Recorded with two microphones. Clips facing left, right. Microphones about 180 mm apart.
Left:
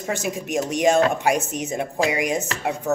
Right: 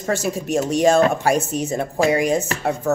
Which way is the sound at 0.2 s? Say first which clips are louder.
Right 3 dB; 35° right (ahead or behind).